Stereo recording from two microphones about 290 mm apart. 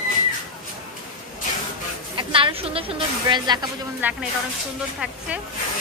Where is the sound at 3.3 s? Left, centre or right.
Centre.